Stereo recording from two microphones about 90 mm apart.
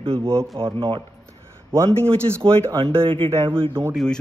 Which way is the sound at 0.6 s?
70° right (ahead or behind).